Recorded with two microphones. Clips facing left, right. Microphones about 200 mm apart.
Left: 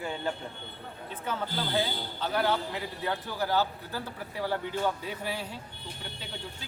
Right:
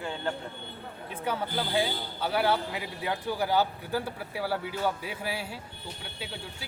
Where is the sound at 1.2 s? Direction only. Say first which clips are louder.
Right 2 dB; 10° right (ahead or behind).